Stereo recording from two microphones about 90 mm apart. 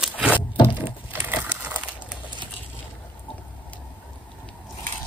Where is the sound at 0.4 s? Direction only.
65° left (ahead or behind).